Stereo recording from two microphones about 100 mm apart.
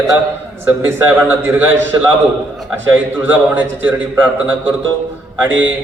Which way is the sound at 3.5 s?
15° right (ahead or behind).